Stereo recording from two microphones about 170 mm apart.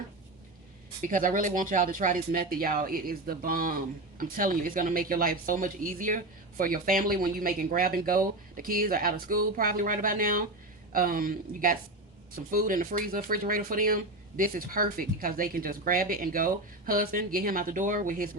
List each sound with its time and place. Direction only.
1.0 s speech: 50° right (ahead or behind)